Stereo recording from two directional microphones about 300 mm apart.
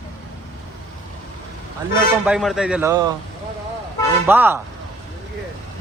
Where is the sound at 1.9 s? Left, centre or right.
Centre.